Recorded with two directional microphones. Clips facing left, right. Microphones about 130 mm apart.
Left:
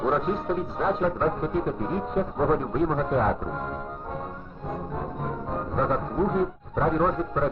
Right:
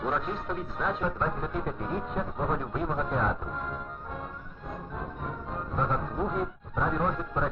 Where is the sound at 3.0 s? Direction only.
25° left (ahead or behind).